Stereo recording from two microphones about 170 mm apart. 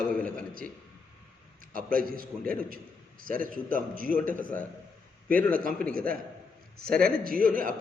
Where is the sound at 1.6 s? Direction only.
55° right (ahead or behind).